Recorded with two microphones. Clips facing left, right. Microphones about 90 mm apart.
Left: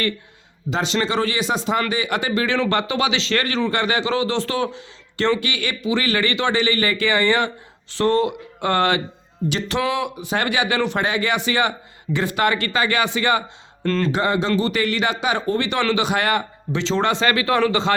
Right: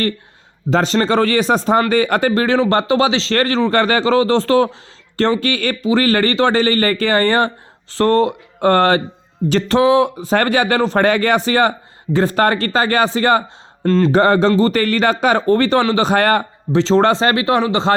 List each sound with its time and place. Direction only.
0.7 s speech: 45° right (ahead or behind)
13.8 s speech: 25° right (ahead or behind)
14.1 s speech: 50° right (ahead or behind)
15.8 s speech: 35° right (ahead or behind)